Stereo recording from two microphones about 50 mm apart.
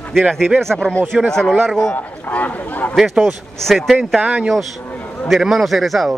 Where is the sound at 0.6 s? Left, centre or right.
Centre.